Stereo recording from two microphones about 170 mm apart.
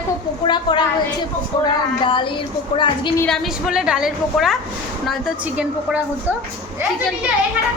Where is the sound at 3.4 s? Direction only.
5° right (ahead or behind).